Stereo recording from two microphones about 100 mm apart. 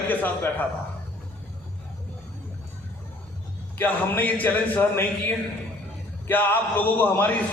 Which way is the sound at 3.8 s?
20° left (ahead or behind).